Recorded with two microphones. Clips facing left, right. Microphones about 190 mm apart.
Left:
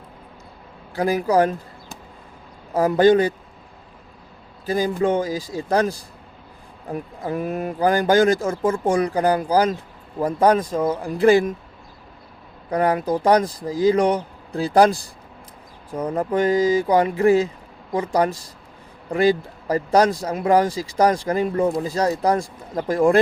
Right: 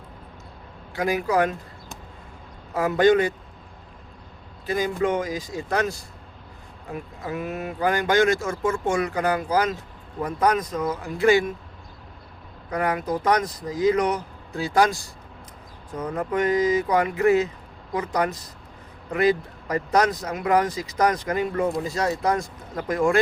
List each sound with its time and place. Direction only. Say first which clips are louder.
0.9 s speech: left 4 dB; 35° left (ahead or behind)
2.7 s speech: left 3 dB; 35° left (ahead or behind)
5.0 s speech: left 3 dB; 30° left (ahead or behind)
12.7 s speech: left 5 dB; 30° left (ahead or behind)